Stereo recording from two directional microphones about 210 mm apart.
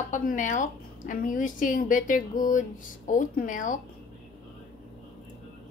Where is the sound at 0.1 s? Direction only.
35° left (ahead or behind).